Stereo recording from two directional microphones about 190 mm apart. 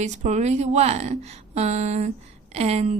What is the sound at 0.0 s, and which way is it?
A woman's voice, 35° right (ahead or behind).